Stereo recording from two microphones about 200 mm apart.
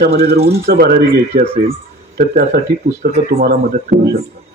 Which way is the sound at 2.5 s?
55° right (ahead or behind).